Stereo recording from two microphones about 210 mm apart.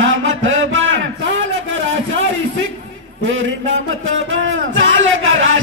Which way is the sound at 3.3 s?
70° right (ahead or behind).